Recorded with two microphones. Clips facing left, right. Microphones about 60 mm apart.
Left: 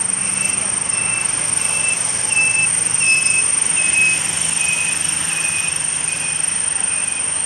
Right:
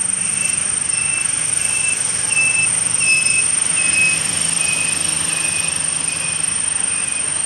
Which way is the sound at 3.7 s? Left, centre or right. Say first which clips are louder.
Even; centre.